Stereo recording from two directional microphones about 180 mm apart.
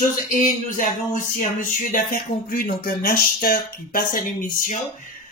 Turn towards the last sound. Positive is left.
turn(degrees=50)  # may be behind; listen again after turning